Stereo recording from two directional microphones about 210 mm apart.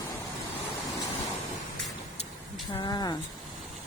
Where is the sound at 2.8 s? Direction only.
20° left (ahead or behind).